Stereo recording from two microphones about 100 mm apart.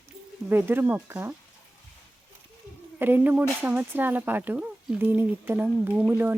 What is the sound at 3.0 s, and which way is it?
Speech, 20° right (ahead or behind).